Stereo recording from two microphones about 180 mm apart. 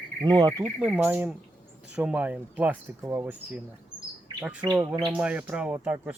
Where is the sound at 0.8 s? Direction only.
10° right (ahead or behind).